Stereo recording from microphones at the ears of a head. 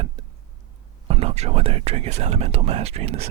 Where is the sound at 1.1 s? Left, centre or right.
Right.